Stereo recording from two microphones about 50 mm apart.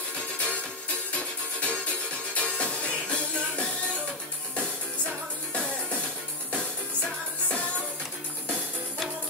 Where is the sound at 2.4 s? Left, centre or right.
Left.